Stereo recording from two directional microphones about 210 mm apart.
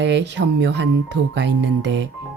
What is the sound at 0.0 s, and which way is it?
Speech, 55° right (ahead or behind).